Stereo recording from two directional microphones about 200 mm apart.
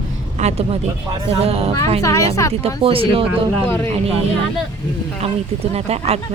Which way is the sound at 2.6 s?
30° right (ahead or behind).